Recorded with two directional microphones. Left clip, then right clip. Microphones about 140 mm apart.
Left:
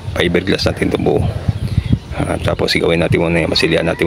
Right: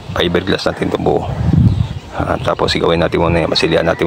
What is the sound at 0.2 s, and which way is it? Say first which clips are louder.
Speech: even; 35° left (ahead or behind).